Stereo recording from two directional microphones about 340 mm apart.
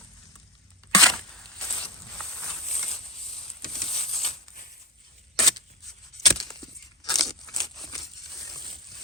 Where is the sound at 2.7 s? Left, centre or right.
Centre.